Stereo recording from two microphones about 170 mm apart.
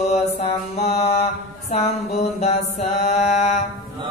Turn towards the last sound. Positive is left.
turn(degrees=40)  # may be behind; listen again after turning